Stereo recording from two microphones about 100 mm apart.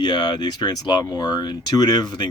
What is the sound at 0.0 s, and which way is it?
Speech, 50° left (ahead or behind).